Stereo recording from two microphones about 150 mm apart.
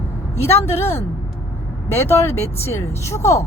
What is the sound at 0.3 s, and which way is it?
Speech, 15° left (ahead or behind).